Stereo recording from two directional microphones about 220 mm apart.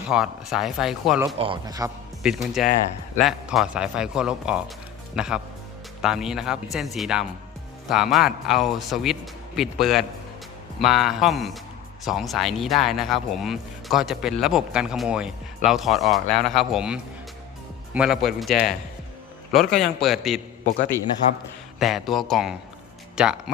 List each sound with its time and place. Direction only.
0.1 s speech: 5° right (ahead or behind)
1.4 s a man's voice: 20° right (ahead or behind)
2.2 s speech: centre (ahead or behind)
21.8 s speech: centre (ahead or behind)